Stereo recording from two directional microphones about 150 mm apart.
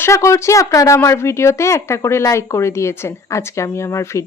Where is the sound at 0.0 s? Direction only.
20° left (ahead or behind).